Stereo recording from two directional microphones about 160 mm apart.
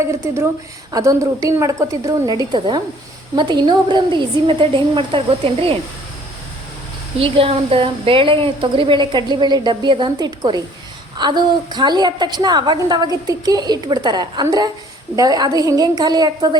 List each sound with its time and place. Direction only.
0.0 s a woman's voice: 20° right (ahead or behind); by 5.7 s 35° right (ahead or behind)
7.2 s a woman's voice: 35° right (ahead or behind)